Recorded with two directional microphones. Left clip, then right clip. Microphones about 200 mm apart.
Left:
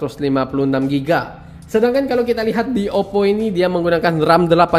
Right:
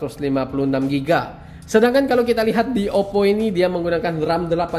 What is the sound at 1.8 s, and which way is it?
Speech, 5° right (ahead or behind).